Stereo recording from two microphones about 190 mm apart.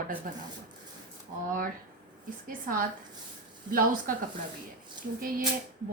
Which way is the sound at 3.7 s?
45° right (ahead or behind).